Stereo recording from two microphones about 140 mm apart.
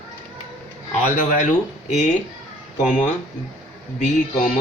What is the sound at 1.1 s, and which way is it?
Speech, 60° left (ahead or behind).